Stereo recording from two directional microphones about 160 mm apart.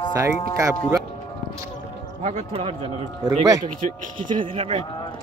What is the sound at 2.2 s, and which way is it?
Speech, 40° right (ahead or behind).